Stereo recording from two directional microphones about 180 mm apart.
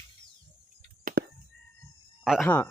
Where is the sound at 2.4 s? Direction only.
10° left (ahead or behind).